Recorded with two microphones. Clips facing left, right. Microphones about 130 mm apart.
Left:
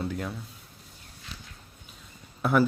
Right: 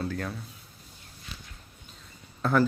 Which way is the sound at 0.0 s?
20° left (ahead or behind).